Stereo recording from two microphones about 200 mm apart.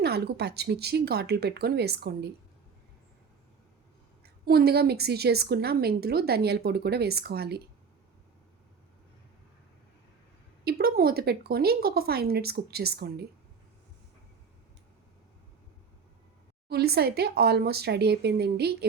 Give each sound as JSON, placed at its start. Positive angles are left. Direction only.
{"t": 0.0, "sound": "speech", "side_deg": -55}
{"t": 4.2, "sound": "a woman's voice", "side_deg": -50}
{"t": 10.6, "sound": "a woman's voice", "side_deg": -50}
{"t": 16.6, "sound": "a woman's voice", "side_deg": -55}